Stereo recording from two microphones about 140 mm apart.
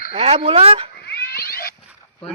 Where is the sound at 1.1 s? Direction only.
90° left.